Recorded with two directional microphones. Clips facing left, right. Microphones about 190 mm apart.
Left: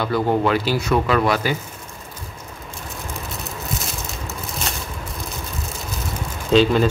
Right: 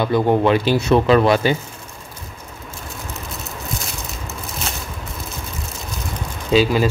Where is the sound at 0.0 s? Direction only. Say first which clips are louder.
Right 3 dB; 20° right (ahead or behind).